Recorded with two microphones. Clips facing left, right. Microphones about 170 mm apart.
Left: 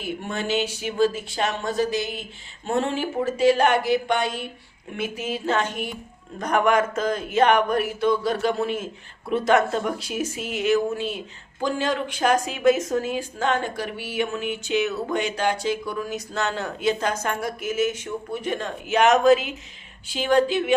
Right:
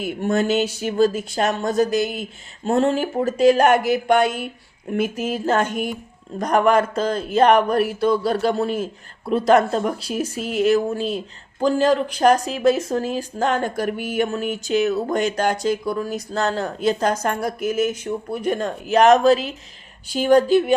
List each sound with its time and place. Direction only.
0.0 s speech: 45° right (ahead or behind)
4.9 s speech: 40° right (ahead or behind)
6.4 s speech: 35° right (ahead or behind)